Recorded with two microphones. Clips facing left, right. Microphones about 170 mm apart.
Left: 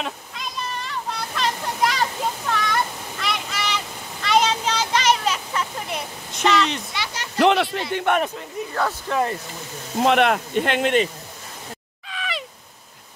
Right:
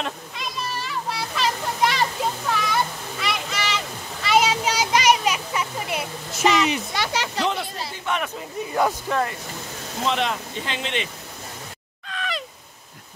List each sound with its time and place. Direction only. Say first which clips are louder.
0.0 s children playing: even; centre (ahead or behind)
2.5 s a sound: even; 5° right (ahead or behind)
7.3 s a sound: left 13 dB; 75° left (ahead or behind)
7.9 s speech: left 6 dB; 60° left (ahead or behind)
8.6 s speech: right 3 dB; centre (ahead or behind)
10.0 s speech: left 7 dB; 60° left (ahead or behind)
12.1 s crow: even; centre (ahead or behind)